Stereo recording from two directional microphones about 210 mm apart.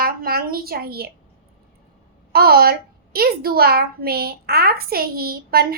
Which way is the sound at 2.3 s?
45° right (ahead or behind).